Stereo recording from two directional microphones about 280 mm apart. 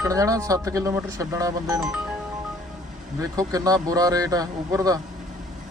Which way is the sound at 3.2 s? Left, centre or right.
Centre.